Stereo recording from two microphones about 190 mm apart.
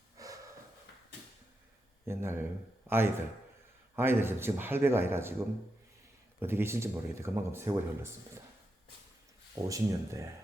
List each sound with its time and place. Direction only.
0.2 s snort: 15° right (ahead or behind)
2.0 s a man's voice: 15° right (ahead or behind)
6.4 s speech: 10° right (ahead or behind)
9.6 s speech: 15° right (ahead or behind)